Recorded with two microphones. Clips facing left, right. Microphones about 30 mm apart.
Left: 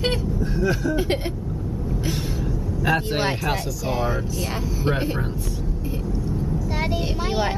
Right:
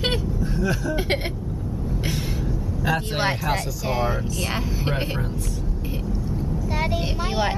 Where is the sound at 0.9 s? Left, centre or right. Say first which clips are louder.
Left 1 dB; right.